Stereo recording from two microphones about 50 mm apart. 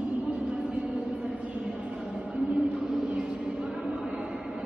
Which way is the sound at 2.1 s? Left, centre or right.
Right.